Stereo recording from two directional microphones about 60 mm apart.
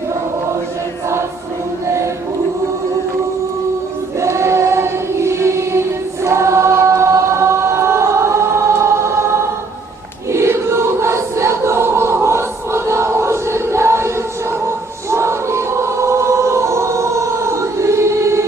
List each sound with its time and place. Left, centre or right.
4.2 s choir: right
15.1 s choir: right